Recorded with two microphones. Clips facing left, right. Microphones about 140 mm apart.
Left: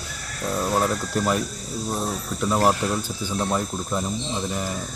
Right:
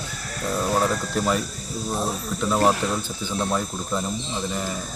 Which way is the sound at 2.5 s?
Centre (ahead or behind).